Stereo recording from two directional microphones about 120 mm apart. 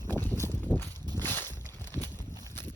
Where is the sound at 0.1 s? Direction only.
15° left (ahead or behind).